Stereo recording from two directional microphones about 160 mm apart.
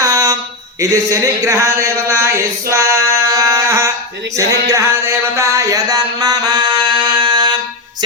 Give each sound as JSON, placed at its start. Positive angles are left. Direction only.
{"t": 0.0, "sound": "a sound", "side_deg": -20}
{"t": 0.8, "sound": "speech", "side_deg": -20}
{"t": 4.7, "sound": "music", "side_deg": -20}